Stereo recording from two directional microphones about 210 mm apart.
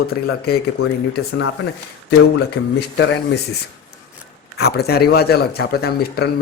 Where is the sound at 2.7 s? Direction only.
55° left (ahead or behind).